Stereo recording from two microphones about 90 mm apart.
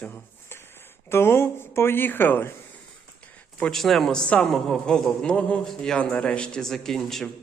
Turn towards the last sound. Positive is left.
turn(degrees=5)  # may be behind; listen again after turning